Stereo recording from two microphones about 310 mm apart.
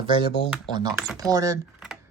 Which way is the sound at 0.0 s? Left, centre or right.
Centre.